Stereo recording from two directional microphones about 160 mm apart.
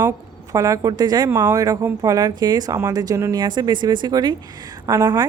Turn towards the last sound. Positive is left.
turn(degrees=-20)  # may be behind; listen again after turning